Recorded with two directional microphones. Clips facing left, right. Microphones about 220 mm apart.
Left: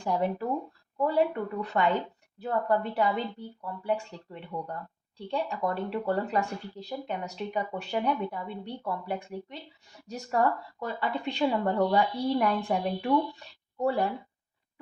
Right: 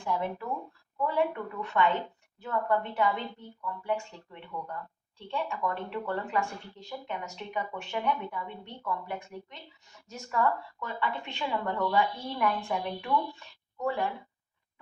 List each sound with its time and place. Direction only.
0.0 s a woman's voice: 40° left (ahead or behind)